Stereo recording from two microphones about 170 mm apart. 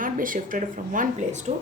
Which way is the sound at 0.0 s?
55° right (ahead or behind).